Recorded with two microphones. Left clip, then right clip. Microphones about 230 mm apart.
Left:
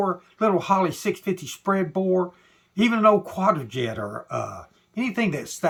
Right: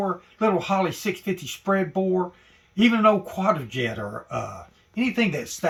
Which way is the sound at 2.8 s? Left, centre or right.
Centre.